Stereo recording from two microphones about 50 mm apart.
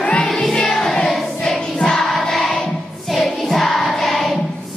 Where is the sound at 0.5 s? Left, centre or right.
Centre.